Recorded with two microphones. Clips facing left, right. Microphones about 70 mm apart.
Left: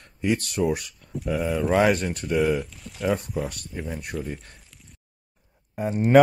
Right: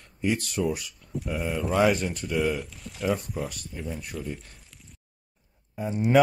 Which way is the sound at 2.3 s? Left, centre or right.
Left.